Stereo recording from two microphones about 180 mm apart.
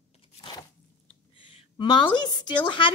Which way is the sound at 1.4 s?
25° left (ahead or behind).